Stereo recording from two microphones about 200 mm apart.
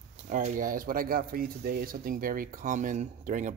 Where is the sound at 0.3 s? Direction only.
40° right (ahead or behind).